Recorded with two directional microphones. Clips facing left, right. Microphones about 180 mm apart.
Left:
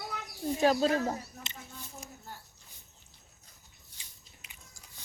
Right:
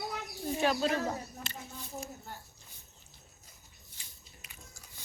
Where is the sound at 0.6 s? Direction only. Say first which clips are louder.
Left 4 dB; 35° left (ahead or behind).